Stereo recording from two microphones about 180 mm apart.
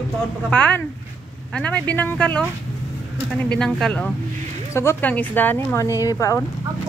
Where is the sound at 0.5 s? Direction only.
5° left (ahead or behind).